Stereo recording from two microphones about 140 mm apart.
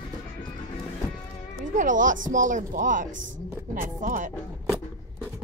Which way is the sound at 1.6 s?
65° right (ahead or behind).